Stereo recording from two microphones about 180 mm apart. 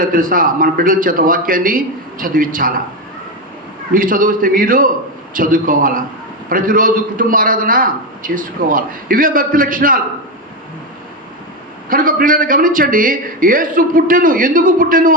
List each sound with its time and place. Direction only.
0.0 s a man's voice: 50° right (ahead or behind)
3.9 s a man's voice: 50° right (ahead or behind)
11.9 s a man's voice: 50° right (ahead or behind)